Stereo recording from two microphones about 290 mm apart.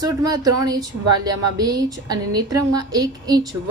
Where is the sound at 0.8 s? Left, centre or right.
Right.